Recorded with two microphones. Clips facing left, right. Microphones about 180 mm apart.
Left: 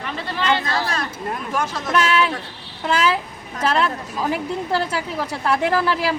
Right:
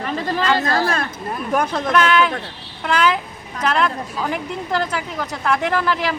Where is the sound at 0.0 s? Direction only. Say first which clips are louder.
Right 4 dB; 40° right (ahead or behind).